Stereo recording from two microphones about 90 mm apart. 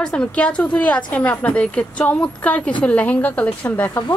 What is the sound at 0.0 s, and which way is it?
A woman's voice, 10° left (ahead or behind).